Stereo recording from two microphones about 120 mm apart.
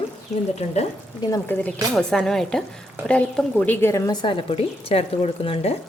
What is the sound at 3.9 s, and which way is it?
Speech, 25° left (ahead or behind).